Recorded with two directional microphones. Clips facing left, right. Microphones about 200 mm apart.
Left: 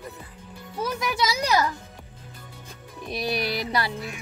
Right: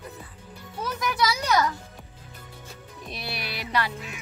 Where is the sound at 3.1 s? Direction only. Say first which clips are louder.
Left 9 dB; 15° left (ahead or behind).